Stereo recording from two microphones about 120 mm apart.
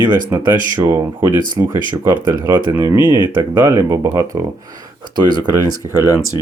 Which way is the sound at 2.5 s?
20° right (ahead or behind).